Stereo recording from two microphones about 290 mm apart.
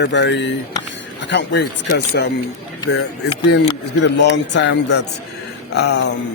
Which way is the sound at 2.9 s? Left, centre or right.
Left.